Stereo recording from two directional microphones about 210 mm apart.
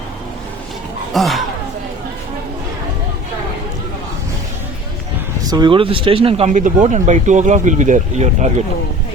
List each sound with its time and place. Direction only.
1.1 s speech: centre (ahead or behind)
5.5 s speech: 20° right (ahead or behind)